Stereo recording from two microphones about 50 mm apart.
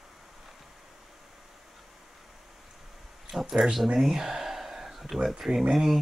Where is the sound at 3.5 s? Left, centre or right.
Centre.